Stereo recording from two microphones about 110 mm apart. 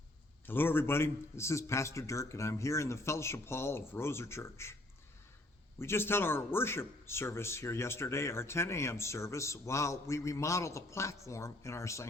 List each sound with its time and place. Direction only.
0.4 s a man's voice: 20° left (ahead or behind)
5.8 s a man's voice: 20° left (ahead or behind)